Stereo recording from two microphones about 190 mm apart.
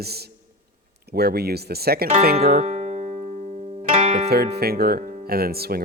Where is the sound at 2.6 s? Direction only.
35° right (ahead or behind).